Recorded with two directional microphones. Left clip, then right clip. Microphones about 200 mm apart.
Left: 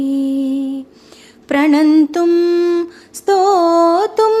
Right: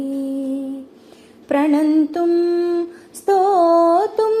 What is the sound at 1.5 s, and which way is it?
Music, 25° left (ahead or behind).